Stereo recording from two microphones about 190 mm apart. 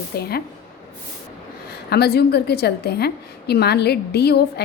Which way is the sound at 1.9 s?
55° left (ahead or behind).